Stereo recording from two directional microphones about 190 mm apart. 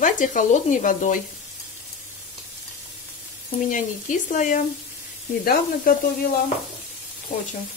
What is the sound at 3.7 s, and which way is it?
Sizzle, 45° left (ahead or behind).